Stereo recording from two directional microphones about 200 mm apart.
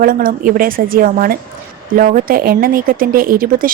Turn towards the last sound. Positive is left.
turn(degrees=-45)  # may be behind; listen again after turning